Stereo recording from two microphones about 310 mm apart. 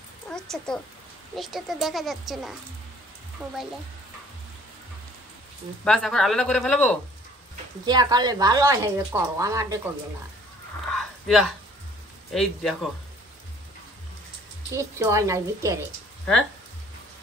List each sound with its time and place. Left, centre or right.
0.3 s a sound: centre
1.3 s a woman's voice: centre
5.9 s a woman's voice: centre
7.8 s speech: centre
10.9 s a sound: centre
12.4 s a woman's voice: centre
14.8 s speech: centre